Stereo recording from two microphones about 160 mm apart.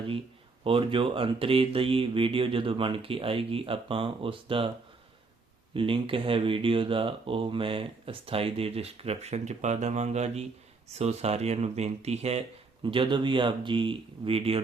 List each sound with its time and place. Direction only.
0.6 s speech: 35° right (ahead or behind)
5.7 s speech: 35° right (ahead or behind)